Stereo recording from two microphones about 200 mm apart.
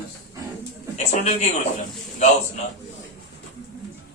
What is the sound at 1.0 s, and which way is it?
Speech, 35° left (ahead or behind).